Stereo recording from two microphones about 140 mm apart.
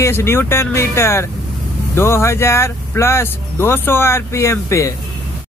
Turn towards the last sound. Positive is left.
turn(degrees=20)  # may be behind; listen again after turning